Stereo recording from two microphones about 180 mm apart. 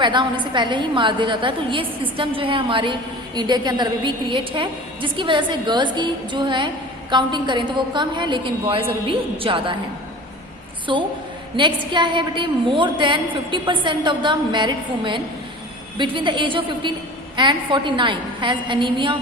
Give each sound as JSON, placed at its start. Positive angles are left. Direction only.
{"t": 0.0, "sound": "a woman's voice", "side_deg": -25}
{"t": 10.9, "sound": "a woman's voice", "side_deg": -25}